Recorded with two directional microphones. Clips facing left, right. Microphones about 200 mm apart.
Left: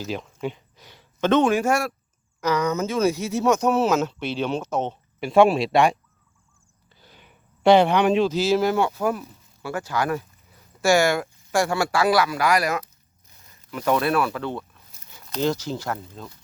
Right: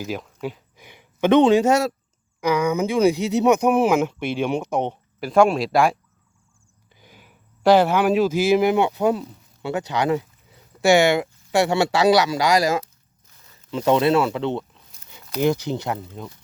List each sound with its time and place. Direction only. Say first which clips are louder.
0.0 s speech: even; 5° right (ahead or behind); by 1.9 s 20° right (ahead or behind)
2.4 s speech: right 3 dB; 10° right (ahead or behind)
5.2 s speech: even; centre (ahead or behind)
6.9 s speech: right 2 dB; 10° right (ahead or behind)